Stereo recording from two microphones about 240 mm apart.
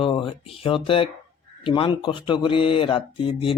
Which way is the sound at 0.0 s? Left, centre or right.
Left.